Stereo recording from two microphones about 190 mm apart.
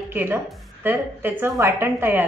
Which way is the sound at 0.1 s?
10° right (ahead or behind).